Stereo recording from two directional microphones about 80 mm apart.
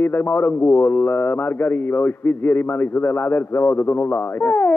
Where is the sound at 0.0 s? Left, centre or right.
Left.